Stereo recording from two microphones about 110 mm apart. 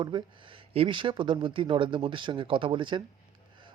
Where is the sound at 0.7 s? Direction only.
55° right (ahead or behind).